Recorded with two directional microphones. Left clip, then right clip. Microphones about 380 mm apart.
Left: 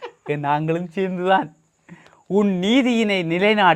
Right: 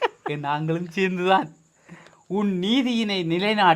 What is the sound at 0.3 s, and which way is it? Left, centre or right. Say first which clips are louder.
Speech: left 5 dB; left.